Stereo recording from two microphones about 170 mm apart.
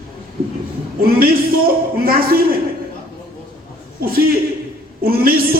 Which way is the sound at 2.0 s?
60° right (ahead or behind).